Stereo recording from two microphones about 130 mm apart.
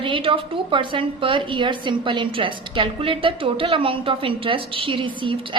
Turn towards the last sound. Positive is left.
turn(degrees=-40)  # may be behind; listen again after turning